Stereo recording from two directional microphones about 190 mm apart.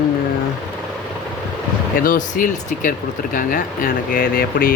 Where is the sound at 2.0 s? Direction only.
45° left (ahead or behind).